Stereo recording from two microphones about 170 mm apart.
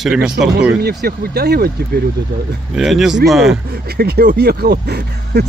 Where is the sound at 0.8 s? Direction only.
70° right (ahead or behind).